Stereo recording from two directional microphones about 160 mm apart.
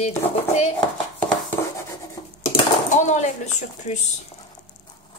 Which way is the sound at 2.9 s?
50° left (ahead or behind).